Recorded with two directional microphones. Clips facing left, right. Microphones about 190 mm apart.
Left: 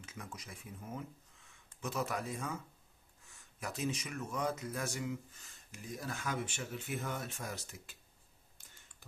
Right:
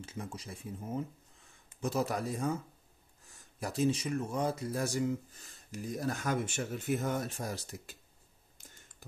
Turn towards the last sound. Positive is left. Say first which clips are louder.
# right 5 dB
turn(degrees=-40)  # may be behind; listen again after turning